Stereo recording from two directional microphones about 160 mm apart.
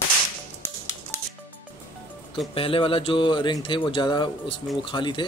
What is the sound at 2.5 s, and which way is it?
Speech, 35° left (ahead or behind).